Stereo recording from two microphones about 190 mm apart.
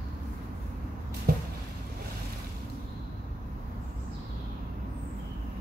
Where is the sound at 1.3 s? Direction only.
55° right (ahead or behind).